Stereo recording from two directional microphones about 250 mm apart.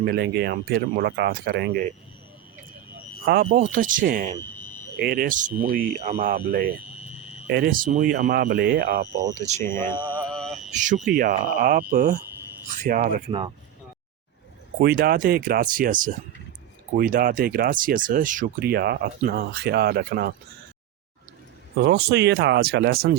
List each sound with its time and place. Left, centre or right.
0.0 s speech: right
3.4 s speech: right
4.4 s a sound: centre
4.9 s speech: right
7.1 s a sound: left
7.4 s speech: right
9.2 s speech: centre
9.6 s speech: centre
10.1 s mantra: centre
10.7 s speech: right
14.8 s speech: right
21.8 s speech: right